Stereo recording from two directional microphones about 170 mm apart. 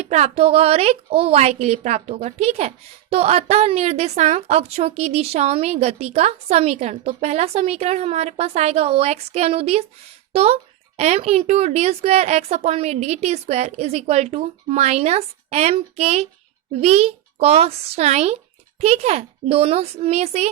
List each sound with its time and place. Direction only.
0.0 s a woman's voice: 40° right (ahead or behind)